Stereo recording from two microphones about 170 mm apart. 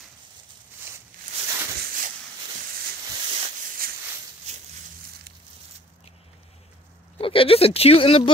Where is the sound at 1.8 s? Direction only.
50° right (ahead or behind).